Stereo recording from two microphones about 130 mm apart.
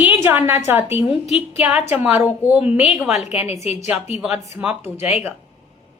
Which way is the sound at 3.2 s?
55° left (ahead or behind).